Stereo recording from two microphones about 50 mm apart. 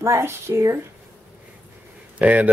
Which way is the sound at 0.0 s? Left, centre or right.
Right.